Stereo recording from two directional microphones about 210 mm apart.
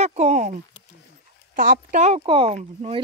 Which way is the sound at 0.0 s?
30° right (ahead or behind).